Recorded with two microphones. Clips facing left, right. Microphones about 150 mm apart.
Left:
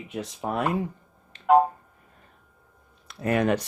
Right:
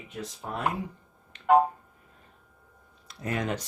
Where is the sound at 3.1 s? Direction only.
65° left (ahead or behind).